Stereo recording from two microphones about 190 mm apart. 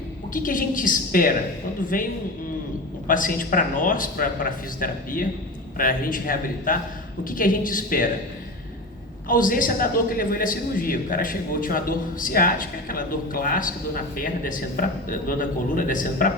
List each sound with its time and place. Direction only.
0.3 s a man's voice: 45° left (ahead or behind)
9.3 s a man's voice: 45° left (ahead or behind)